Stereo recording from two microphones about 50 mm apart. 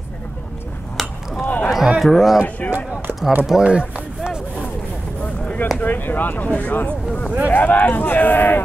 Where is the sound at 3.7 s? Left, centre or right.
Right.